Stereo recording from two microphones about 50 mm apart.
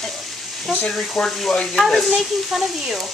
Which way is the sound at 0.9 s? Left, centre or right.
Centre.